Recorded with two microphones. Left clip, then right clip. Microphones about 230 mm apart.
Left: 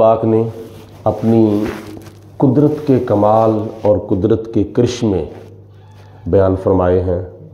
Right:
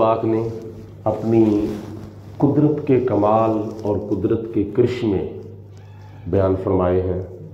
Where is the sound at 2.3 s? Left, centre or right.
Left.